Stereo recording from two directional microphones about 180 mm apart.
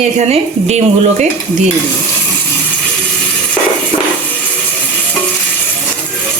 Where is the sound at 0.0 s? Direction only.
40° right (ahead or behind).